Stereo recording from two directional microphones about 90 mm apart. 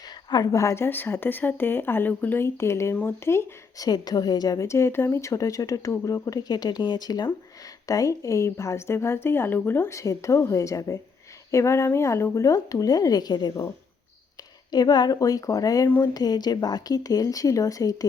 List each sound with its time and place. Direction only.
0.3 s speech: 50° left (ahead or behind); by 3.4 s 30° left (ahead or behind)
3.8 s a woman's voice: 50° left (ahead or behind)
7.9 s a woman's voice: 40° left (ahead or behind)
14.7 s a woman's voice: 50° left (ahead or behind)